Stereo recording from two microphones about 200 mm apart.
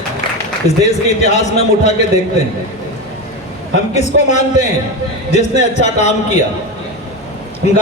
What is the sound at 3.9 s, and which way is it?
A man's voice, 35° left (ahead or behind).